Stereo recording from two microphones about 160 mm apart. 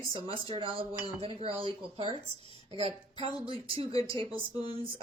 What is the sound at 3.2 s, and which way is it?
Speech, 35° right (ahead or behind).